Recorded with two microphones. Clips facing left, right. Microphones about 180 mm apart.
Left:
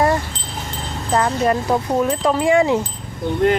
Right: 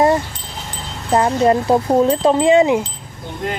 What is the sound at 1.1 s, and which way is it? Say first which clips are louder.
Speech: right 4 dB; 25° right (ahead or behind).